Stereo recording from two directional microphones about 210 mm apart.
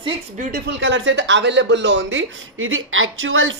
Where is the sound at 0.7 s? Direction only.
65° right (ahead or behind).